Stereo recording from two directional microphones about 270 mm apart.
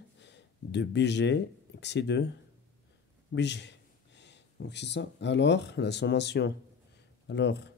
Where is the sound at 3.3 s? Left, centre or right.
Left.